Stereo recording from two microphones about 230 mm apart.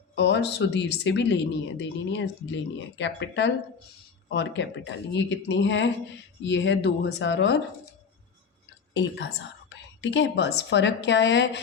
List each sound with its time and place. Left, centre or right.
0.2 s speech: left
8.9 s a woman's voice: left